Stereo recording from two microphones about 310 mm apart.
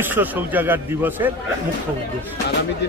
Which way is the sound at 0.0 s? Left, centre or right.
Centre.